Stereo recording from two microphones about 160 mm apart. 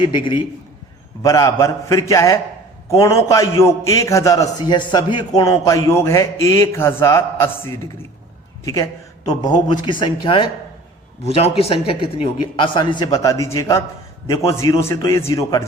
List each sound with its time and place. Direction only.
0.0 s speech: 30° left (ahead or behind)
1.2 s a man's voice: 20° left (ahead or behind)